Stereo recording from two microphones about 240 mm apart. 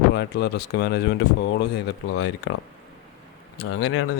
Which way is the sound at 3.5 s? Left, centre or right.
Left.